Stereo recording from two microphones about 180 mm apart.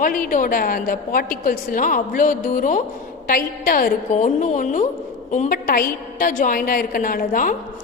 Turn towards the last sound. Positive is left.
turn(degrees=50)  # may be behind; listen again after turning